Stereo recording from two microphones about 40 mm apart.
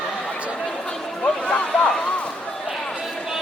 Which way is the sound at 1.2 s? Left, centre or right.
Left.